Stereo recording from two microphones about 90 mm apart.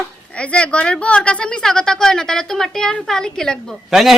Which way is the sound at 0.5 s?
15° left (ahead or behind).